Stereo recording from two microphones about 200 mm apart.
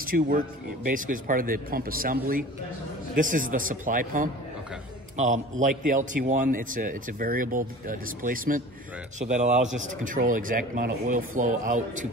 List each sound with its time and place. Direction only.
0.0 s a man's voice: 45° right (ahead or behind)